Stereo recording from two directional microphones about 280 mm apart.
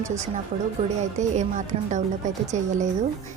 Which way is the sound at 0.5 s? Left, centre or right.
Right.